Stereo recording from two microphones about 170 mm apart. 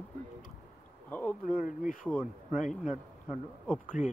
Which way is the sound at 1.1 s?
10° left (ahead or behind).